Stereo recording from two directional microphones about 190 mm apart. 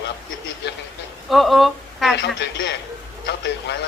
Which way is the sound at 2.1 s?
65° left (ahead or behind).